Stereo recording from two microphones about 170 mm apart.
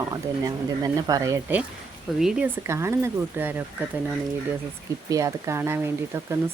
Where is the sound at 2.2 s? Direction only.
5° right (ahead or behind).